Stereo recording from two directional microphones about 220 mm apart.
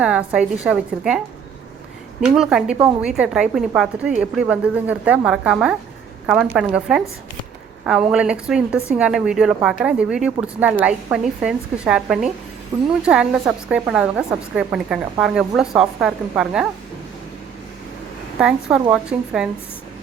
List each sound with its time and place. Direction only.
0.0 s a woman's voice: 5° right (ahead or behind)
2.2 s a woman's voice: 5° right (ahead or behind)
18.3 s a woman's voice: 5° right (ahead or behind)